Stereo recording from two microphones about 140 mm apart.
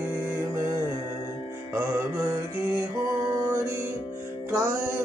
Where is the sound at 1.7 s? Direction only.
20° right (ahead or behind).